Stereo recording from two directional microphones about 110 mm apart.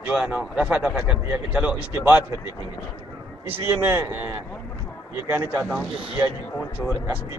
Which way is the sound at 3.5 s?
20° right (ahead or behind).